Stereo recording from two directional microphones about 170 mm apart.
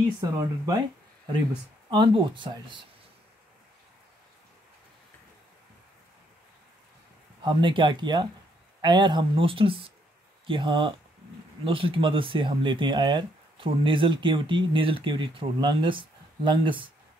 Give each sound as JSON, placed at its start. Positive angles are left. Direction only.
{"t": 0.2, "sound": "speech", "side_deg": -20}
{"t": 1.9, "sound": "speech", "side_deg": -30}
{"t": 7.4, "sound": "speech", "side_deg": -30}